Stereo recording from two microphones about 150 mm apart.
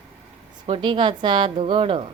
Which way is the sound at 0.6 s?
35° right (ahead or behind).